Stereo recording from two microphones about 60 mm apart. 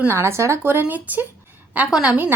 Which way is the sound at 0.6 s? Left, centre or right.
Right.